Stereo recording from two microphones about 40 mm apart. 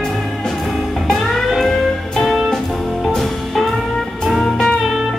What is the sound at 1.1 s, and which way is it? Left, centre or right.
Music, centre.